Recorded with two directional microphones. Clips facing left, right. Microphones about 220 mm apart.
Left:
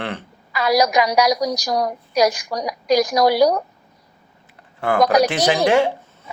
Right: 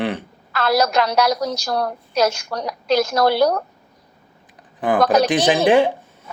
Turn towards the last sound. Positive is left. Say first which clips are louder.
# right 2 dB
turn(degrees=-15)  # may be behind; listen again after turning